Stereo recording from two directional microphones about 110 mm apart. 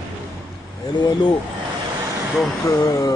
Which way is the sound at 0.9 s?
40° left (ahead or behind).